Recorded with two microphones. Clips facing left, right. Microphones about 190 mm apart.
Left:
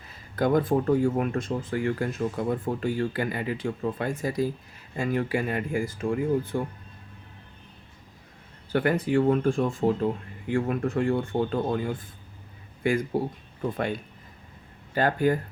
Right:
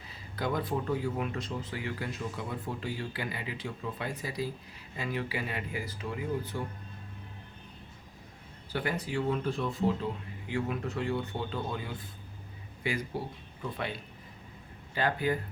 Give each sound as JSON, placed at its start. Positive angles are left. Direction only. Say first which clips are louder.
{"t": 0.3, "sound": "speech", "louder": "left 9 dB", "side_deg": 50}
{"t": 8.7, "sound": "speech", "louder": "left 10 dB", "side_deg": 55}